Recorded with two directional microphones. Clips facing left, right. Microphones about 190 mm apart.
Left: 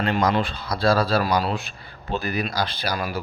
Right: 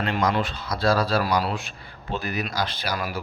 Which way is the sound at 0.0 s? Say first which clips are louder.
Left 2 dB; 30° left (ahead or behind).